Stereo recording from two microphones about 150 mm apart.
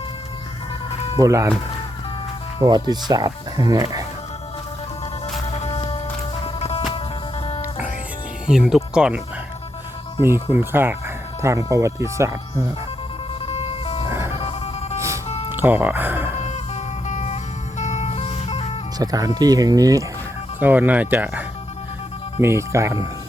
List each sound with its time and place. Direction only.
1.2 s speech: 20° right (ahead or behind)
2.6 s speech: 25° right (ahead or behind)
5.5 s music: 45° left (ahead or behind)
8.4 s speech: 5° right (ahead or behind)
10.5 s speech: 15° right (ahead or behind)
13.4 s music: 40° left (ahead or behind)
15.5 s speech: 15° right (ahead or behind)
16.5 s music: 50° left (ahead or behind)
18.9 s speech: 25° right (ahead or behind)
20.6 s speech: 10° right (ahead or behind)